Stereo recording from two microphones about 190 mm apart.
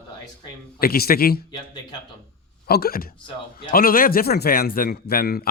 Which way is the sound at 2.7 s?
55° left (ahead or behind).